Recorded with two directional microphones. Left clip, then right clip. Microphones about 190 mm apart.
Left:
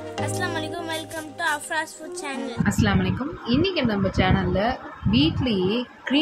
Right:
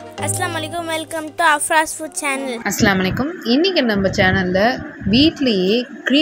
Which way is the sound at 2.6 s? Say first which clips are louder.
Right 6 dB; 30° right (ahead or behind).